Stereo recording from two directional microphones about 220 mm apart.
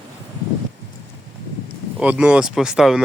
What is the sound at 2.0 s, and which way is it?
Speech, 5° right (ahead or behind).